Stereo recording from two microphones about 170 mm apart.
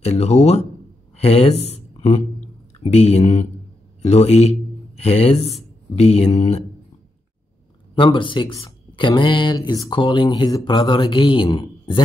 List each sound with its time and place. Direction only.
0.0 s speech: 40° left (ahead or behind)
7.9 s speech: 30° left (ahead or behind)